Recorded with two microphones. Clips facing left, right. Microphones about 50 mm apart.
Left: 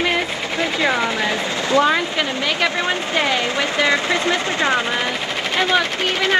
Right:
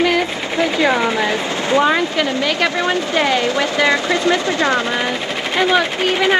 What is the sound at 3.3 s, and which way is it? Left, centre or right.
Speech, right.